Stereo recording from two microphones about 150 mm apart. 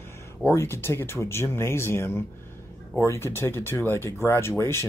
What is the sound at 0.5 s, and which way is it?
Speech, 15° left (ahead or behind).